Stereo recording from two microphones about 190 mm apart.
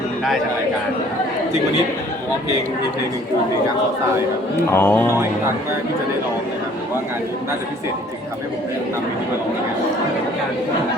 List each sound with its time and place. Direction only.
4.7 s speech: 10° left (ahead or behind)